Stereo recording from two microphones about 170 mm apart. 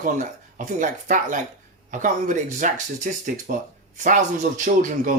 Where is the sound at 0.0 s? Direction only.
50° right (ahead or behind).